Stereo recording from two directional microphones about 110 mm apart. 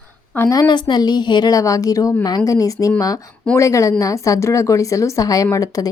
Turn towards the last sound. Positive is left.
turn(degrees=35)  # may be behind; listen again after turning